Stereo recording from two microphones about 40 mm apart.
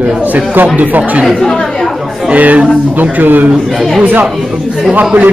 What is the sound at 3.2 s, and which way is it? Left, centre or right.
Speech, right.